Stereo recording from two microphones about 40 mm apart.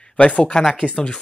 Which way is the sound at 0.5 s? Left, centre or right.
Centre.